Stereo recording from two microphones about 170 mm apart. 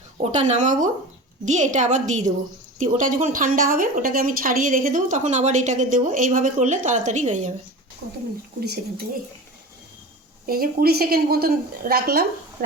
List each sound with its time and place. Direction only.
0.2 s a woman's voice: 40° right (ahead or behind)
8.6 s speech: 70° right (ahead or behind)
10.4 s a woman's voice: 60° right (ahead or behind)